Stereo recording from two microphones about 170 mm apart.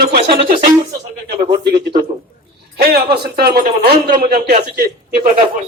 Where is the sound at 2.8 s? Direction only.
65° right (ahead or behind).